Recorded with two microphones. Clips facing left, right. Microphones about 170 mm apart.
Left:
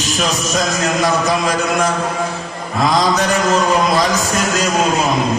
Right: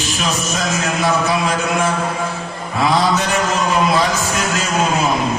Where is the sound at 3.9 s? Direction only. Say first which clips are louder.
Left 2 dB; 40° left (ahead or behind).